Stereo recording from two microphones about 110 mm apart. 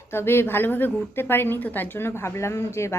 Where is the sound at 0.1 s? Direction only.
20° left (ahead or behind).